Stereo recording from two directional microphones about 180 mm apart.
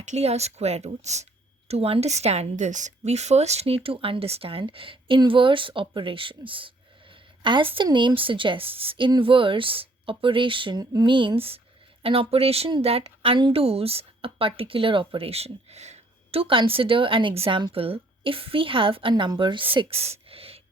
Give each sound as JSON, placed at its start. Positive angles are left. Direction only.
{"t": 0.0, "sound": "speech", "side_deg": -40}